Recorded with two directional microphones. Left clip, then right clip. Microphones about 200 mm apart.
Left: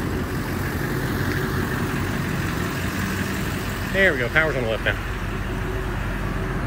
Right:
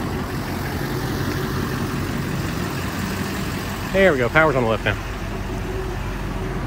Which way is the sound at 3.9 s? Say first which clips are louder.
Right 3 dB; 15° right (ahead or behind).